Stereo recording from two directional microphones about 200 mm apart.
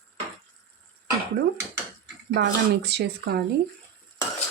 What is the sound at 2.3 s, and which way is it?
Speech, 55° right (ahead or behind).